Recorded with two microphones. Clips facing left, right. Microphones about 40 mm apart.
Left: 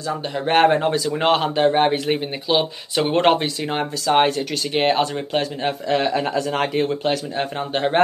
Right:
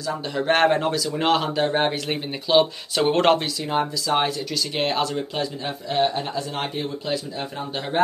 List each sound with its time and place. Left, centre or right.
0.3 s speech: centre
1.7 s speech: centre
4.0 s a man's voice: left
4.7 s speech: left
5.1 s a man's voice: left
5.9 s speech: left
7.1 s a man's voice: left